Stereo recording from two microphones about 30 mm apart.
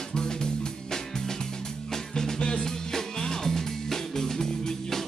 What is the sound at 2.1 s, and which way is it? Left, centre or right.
Music, left.